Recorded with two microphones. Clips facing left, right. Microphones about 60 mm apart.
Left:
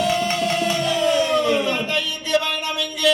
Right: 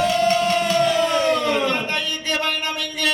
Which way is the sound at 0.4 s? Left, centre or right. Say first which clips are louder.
Right 3 dB; right.